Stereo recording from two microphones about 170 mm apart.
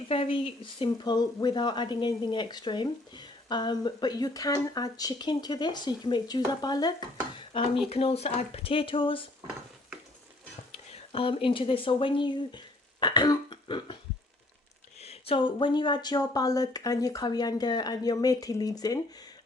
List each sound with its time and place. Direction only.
0.1 s a woman's voice: 30° left (ahead or behind)
10.9 s speech: 35° left (ahead or behind)
15.0 s a woman's voice: 30° left (ahead or behind)